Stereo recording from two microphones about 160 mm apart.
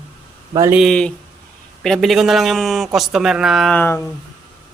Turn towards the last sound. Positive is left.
turn(degrees=15)  # may be behind; listen again after turning